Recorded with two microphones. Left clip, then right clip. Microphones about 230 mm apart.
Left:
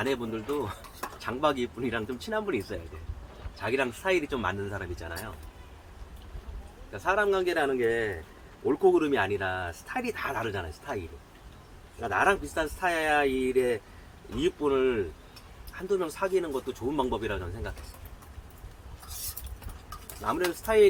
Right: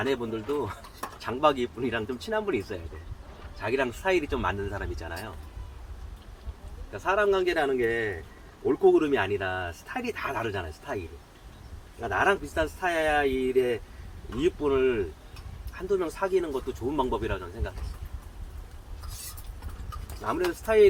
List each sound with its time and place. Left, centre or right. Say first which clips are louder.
0.0 s speech: right 2 dB; centre
6.9 s speech: right 1 dB; centre
20.5 s speech: right 2 dB; centre